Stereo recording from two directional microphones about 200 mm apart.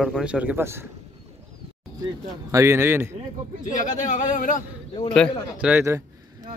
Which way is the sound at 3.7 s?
40° left (ahead or behind).